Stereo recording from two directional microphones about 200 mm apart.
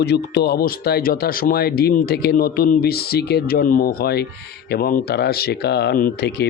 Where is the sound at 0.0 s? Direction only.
55° left (ahead or behind).